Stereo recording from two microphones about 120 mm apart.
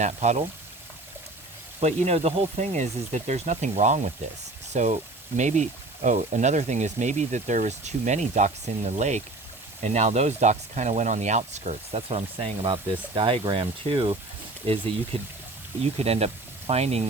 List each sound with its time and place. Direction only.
0.0 s speech: 70° right (ahead or behind)
1.8 s speech: 60° right (ahead or behind)
4.7 s speech: 90° right; by 14.2 s 45° right (ahead or behind)
14.7 s speech: 55° right (ahead or behind)